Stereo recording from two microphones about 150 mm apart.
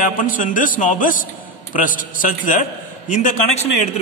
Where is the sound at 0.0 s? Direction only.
60° left (ahead or behind).